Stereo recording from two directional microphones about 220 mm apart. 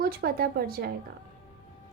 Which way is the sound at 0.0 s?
45° right (ahead or behind).